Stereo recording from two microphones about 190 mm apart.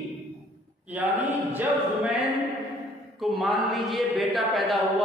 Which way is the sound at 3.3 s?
Centre (ahead or behind).